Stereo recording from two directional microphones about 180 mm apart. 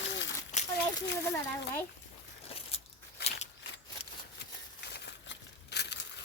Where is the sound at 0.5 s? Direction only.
40° left (ahead or behind).